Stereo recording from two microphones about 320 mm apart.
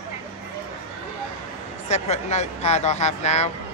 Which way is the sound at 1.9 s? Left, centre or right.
Left.